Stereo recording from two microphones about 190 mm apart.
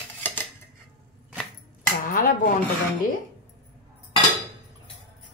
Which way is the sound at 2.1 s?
50° left (ahead or behind).